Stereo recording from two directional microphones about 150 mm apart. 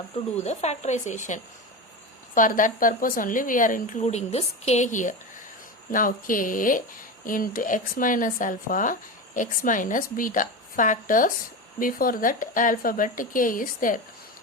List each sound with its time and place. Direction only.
0.3 s speech: 45° left (ahead or behind); by 14.0 s 65° left (ahead or behind)